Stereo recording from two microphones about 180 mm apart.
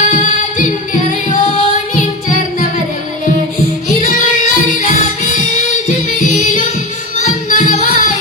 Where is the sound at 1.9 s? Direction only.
45° left (ahead or behind).